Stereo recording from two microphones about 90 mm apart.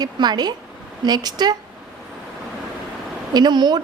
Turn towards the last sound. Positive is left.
turn(degrees=-55)  # may be behind; listen again after turning